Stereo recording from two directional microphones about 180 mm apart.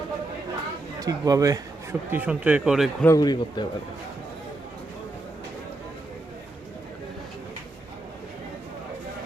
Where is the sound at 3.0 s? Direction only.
20° left (ahead or behind).